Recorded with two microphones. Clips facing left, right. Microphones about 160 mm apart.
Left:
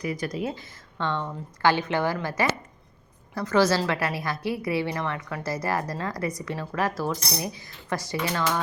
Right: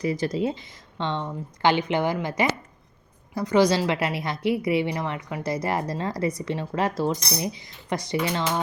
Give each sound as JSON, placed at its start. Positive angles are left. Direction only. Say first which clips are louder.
{"t": 0.0, "sound": "a woman's voice", "louder": "right 4 dB", "side_deg": -25}